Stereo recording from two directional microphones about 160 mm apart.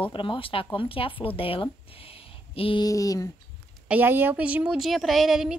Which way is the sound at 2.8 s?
20° left (ahead or behind).